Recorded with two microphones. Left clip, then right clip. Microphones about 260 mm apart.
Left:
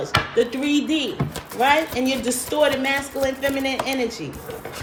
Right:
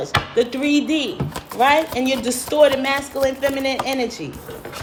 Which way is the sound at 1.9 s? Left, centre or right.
Centre.